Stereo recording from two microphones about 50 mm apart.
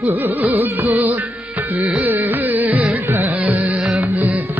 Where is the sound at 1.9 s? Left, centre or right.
Right.